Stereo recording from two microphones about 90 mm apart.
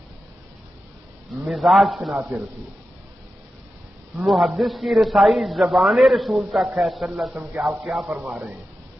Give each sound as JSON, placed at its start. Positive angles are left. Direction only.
{"t": 1.5, "sound": "a man's voice", "side_deg": 0}
{"t": 2.1, "sound": "speech", "side_deg": -20}
{"t": 4.2, "sound": "a man's voice", "side_deg": 0}
{"t": 8.0, "sound": "speech", "side_deg": -15}